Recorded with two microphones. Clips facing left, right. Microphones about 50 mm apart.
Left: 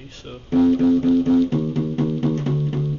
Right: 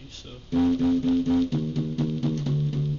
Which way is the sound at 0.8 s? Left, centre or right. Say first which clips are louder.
Left 6 dB; left.